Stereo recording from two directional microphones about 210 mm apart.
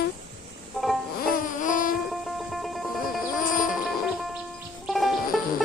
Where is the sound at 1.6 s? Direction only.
40° left (ahead or behind).